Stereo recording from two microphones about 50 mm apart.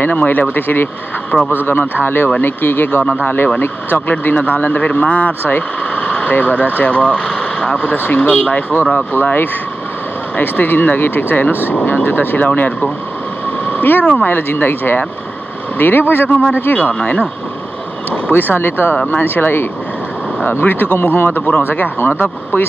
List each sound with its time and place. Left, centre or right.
0.1 s speech: left
4.1 s speech: left
13.7 s vehicle: left
14.0 s speech: left
16.9 s speech: left
18.3 s speech: left